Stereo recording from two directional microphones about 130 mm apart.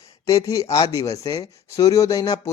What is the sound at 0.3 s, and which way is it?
Speech, 30° left (ahead or behind).